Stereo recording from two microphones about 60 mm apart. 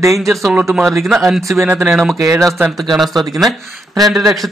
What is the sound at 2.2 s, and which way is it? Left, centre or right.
Speech, right.